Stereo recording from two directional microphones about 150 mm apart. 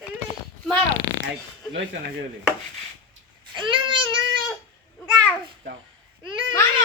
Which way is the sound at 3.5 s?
35° right (ahead or behind).